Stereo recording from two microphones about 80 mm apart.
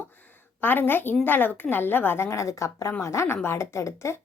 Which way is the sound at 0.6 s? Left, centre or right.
Left.